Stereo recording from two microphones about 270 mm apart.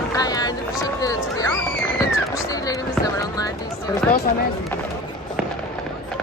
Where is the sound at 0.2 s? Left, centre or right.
Centre.